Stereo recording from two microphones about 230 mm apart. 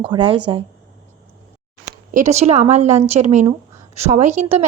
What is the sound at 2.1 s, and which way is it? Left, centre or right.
A woman's voice, right.